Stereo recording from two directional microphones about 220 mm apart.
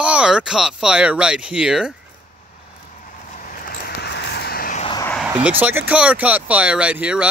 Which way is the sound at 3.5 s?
45° left (ahead or behind).